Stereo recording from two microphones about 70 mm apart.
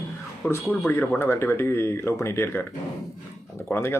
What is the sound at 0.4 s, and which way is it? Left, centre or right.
A man's voice, left.